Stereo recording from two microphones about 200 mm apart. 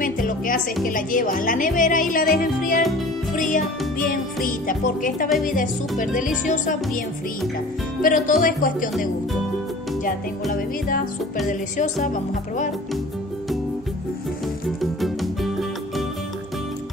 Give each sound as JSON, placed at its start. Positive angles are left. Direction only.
{"t": 0.0, "sound": "speech", "side_deg": 45}
{"t": 3.3, "sound": "music", "side_deg": 40}
{"t": 4.5, "sound": "speech", "side_deg": 40}
{"t": 5.5, "sound": "music", "side_deg": 40}
{"t": 8.0, "sound": "speech", "side_deg": 45}
{"t": 11.4, "sound": "music", "side_deg": 40}
{"t": 14.8, "sound": "music", "side_deg": 0}